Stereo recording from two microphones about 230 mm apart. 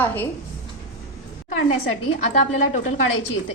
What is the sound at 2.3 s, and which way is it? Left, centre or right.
Speech, left.